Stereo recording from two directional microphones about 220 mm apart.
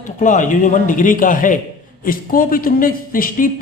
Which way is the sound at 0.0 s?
35° left (ahead or behind).